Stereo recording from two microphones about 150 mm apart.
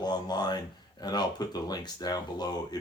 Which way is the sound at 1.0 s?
25° left (ahead or behind).